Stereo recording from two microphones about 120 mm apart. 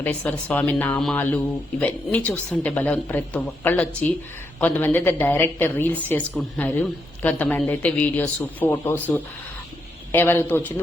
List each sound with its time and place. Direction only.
0.0 s a woman's voice: 15° left (ahead or behind)